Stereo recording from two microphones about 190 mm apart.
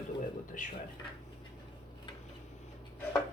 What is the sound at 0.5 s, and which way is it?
Speech, 45° left (ahead or behind).